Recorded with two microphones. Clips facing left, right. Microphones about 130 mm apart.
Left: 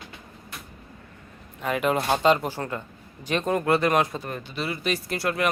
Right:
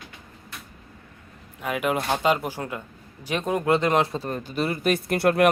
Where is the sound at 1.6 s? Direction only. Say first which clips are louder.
Left 1 dB; 10° right (ahead or behind).